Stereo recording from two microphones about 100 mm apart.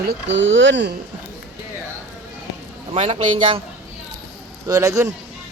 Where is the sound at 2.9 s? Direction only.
90° right.